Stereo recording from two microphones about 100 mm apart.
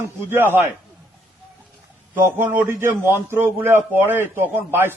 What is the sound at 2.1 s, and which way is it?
A man's voice, 20° right (ahead or behind).